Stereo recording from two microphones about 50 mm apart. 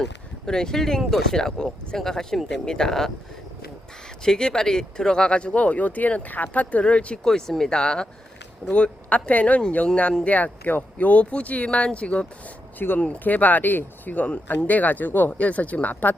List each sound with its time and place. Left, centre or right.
0.4 s speech: centre
4.2 s speech: centre
7.3 s speech: centre
10.2 s speech: left